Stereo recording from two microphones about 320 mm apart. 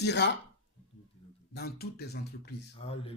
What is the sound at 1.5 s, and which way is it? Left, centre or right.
Speech, left.